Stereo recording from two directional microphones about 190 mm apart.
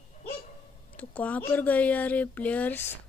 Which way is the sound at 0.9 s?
5° left (ahead or behind).